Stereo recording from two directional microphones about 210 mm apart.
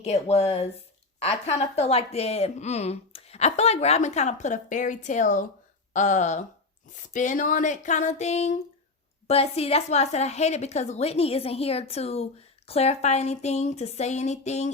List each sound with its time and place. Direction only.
0.0 s speech: 30° left (ahead or behind)